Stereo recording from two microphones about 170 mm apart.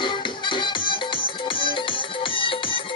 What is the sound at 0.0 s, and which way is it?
Music, 30° left (ahead or behind).